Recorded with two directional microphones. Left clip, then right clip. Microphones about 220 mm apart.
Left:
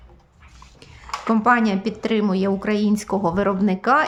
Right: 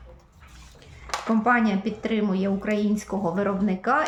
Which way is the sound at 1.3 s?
50° left (ahead or behind).